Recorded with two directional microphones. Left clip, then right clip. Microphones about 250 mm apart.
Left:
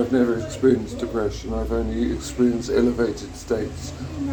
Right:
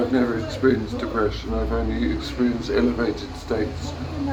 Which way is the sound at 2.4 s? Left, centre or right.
Left.